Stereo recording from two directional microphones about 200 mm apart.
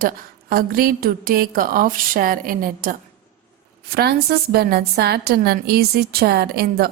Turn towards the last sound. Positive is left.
turn(degrees=-50)  # may be behind; listen again after turning